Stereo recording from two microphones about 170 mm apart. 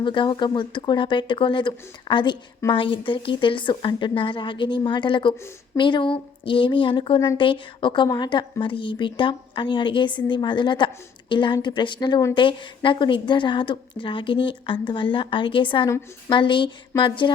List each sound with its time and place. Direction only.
0.0 s speech: 30° left (ahead or behind)
7.2 s speech: 20° left (ahead or behind)
7.4 s speech: 30° left (ahead or behind)